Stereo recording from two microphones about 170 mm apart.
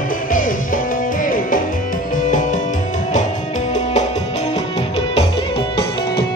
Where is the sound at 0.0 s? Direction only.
55° left (ahead or behind).